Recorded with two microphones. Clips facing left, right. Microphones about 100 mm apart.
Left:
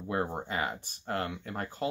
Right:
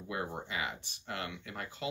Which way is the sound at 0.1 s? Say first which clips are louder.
Left 6 dB; 40° left (ahead or behind).